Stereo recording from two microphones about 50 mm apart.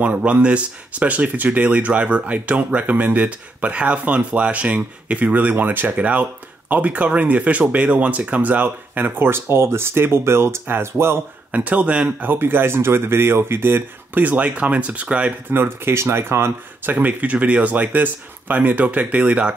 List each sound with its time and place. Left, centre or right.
0.0 s speech: right
11.5 s speech: right
12.3 s speech: right
14.3 s speech: right
15.5 s speech: right
16.9 s speech: right